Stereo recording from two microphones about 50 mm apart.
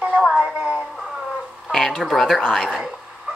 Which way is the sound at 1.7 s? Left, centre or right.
Centre.